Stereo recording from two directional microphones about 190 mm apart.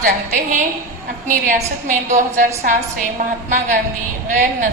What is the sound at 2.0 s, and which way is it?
Speech, 40° right (ahead or behind).